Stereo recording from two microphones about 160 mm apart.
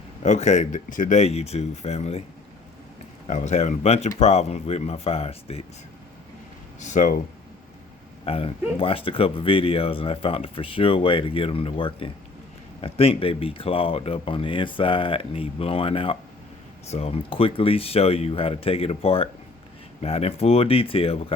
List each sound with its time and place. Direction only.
0.2 s speech: 45° left (ahead or behind)
3.2 s speech: 45° left (ahead or behind)
6.7 s speech: 50° left (ahead or behind)
8.2 s speech: 35° left (ahead or behind)